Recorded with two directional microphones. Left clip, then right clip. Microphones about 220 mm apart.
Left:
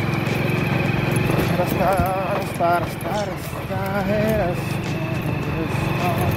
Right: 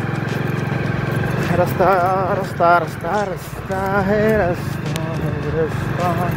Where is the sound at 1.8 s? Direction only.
50° right (ahead or behind).